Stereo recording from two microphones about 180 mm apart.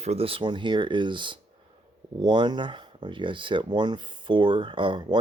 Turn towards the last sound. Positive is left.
turn(degrees=-25)  # may be behind; listen again after turning